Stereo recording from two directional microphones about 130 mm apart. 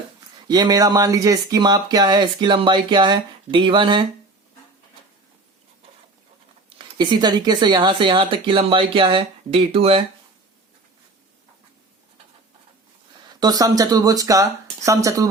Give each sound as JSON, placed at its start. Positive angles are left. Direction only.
{"t": 0.4, "sound": "speech", "side_deg": -30}
{"t": 6.7, "sound": "speech", "side_deg": -40}
{"t": 13.4, "sound": "speech", "side_deg": -30}